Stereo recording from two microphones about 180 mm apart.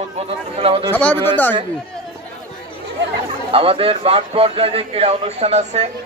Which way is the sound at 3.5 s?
30° right (ahead or behind).